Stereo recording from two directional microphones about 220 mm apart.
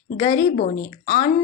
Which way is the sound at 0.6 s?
40° left (ahead or behind).